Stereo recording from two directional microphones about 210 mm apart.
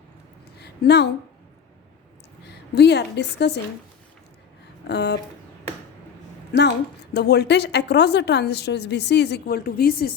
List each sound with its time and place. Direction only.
0.6 s a sound: 50° left (ahead or behind)
2.5 s a woman's voice: 50° left (ahead or behind)
4.9 s a woman's voice: 55° left (ahead or behind)
7.1 s a woman's voice: 50° left (ahead or behind)